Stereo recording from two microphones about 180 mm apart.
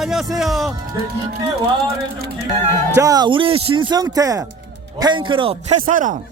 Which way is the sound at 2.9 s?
20° right (ahead or behind).